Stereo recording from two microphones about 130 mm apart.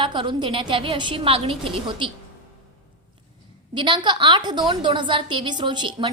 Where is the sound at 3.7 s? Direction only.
35° right (ahead or behind).